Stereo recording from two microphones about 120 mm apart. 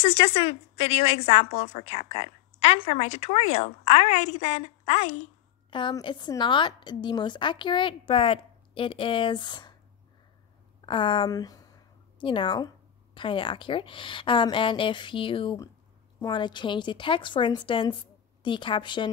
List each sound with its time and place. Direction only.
0.0 s a woman's voice: 50° left (ahead or behind); by 5.3 s 65° left (ahead or behind)
5.7 s a woman's voice: 40° left (ahead or behind)
10.9 s a woman's voice: 45° left (ahead or behind)
12.2 s a woman's voice: 45° left (ahead or behind)